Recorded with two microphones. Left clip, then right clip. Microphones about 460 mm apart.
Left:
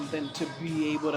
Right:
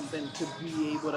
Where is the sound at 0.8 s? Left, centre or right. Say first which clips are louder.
Left 3 dB; left.